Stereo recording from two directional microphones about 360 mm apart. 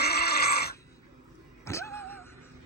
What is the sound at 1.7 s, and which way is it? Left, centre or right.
Music, centre.